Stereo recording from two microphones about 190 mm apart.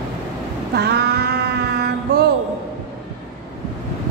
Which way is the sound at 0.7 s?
60° right (ahead or behind).